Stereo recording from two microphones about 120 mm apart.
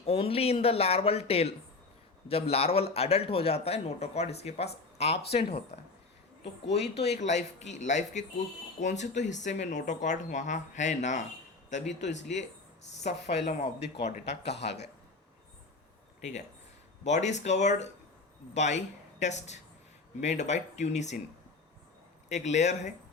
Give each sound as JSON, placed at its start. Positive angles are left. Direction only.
{"t": 0.0, "sound": "a man's voice", "side_deg": 55}
{"t": 7.0, "sound": "speech", "side_deg": 70}
{"t": 17.0, "sound": "speech", "side_deg": 75}
{"t": 22.3, "sound": "speech", "side_deg": 75}